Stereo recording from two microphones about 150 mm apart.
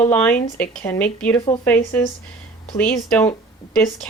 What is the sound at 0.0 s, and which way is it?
Speech, 10° left (ahead or behind).